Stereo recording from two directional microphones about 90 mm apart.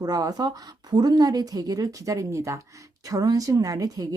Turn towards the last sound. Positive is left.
turn(degrees=-40)  # may be behind; listen again after turning